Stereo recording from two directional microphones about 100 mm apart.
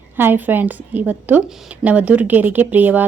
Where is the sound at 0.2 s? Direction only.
20° right (ahead or behind).